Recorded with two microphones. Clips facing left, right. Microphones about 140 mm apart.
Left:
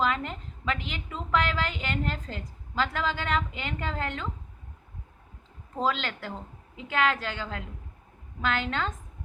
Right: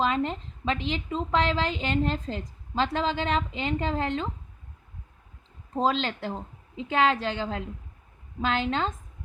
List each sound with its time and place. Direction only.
0.0 s a woman's voice: 30° right (ahead or behind)
5.7 s a woman's voice: 30° right (ahead or behind)